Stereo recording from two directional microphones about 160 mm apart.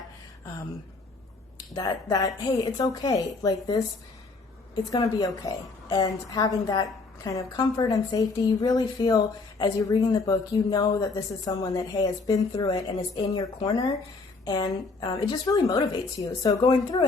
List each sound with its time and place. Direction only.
1.7 s a woman's voice: 25° left (ahead or behind)